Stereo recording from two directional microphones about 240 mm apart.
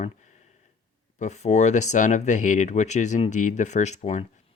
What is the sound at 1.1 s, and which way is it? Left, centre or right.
Speech, left.